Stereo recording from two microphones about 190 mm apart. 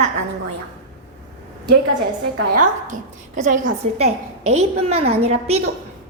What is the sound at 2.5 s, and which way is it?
A woman's voice, 40° right (ahead or behind).